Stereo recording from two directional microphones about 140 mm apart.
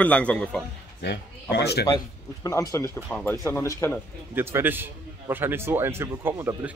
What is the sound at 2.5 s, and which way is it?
Speech, 25° left (ahead or behind).